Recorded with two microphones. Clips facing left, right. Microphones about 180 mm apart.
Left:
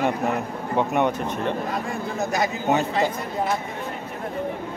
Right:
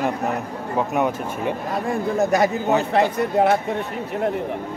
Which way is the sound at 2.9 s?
60° right (ahead or behind).